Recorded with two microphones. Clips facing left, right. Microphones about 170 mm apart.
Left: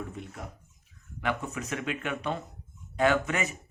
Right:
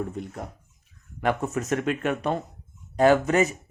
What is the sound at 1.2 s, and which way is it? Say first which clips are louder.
Speech: right 6 dB; 45° right (ahead or behind).